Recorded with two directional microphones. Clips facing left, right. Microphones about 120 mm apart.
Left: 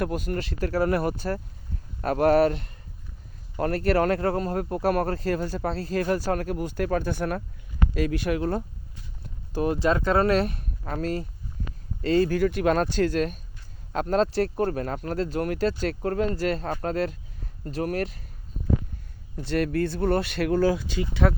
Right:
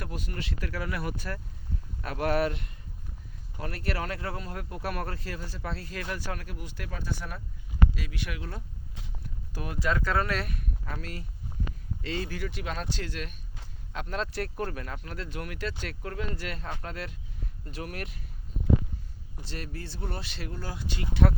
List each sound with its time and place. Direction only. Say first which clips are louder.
0.0 s speech: left 10 dB; 50° left (ahead or behind)
9.2 s speech: left 13 dB; 30° left (ahead or behind)
19.4 s speech: left 16 dB; 60° left (ahead or behind); by 21.4 s 90° left